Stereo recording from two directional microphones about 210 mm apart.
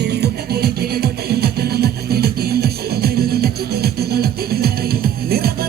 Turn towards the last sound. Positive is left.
turn(degrees=-45)  # may be behind; listen again after turning